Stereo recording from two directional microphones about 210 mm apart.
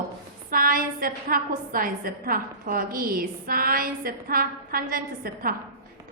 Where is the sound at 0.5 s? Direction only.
40° right (ahead or behind).